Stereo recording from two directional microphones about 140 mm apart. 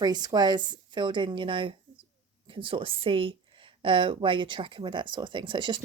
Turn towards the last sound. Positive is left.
turn(degrees=-35)  # may be behind; listen again after turning